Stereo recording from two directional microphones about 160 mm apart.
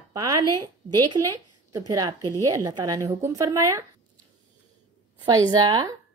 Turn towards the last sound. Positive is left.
turn(degrees=-25)  # may be behind; listen again after turning